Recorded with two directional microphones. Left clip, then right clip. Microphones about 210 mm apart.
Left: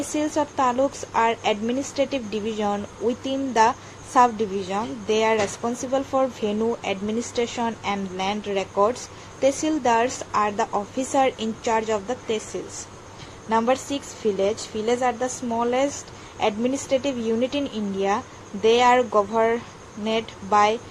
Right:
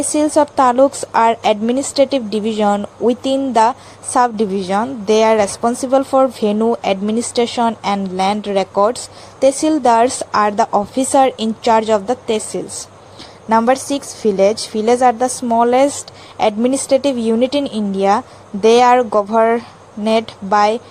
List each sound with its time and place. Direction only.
0.1 s a woman's voice: 35° right (ahead or behind)
13.5 s a woman's voice: 40° right (ahead or behind)